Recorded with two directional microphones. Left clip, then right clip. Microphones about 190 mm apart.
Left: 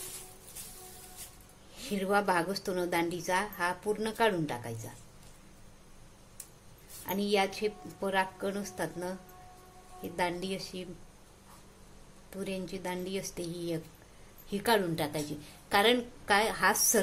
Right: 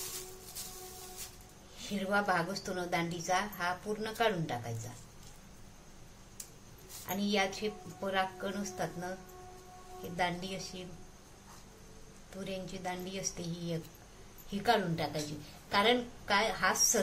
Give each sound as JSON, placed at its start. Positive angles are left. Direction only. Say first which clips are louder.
{"t": 1.8, "sound": "a woman's voice", "louder": "left 3 dB", "side_deg": 45}
{"t": 7.1, "sound": "a woman's voice", "louder": "left 3 dB", "side_deg": 50}
{"t": 10.1, "sound": "a woman's voice", "louder": "left 2 dB", "side_deg": 50}
{"t": 12.4, "sound": "a woman's voice", "louder": "left 2 dB", "side_deg": 50}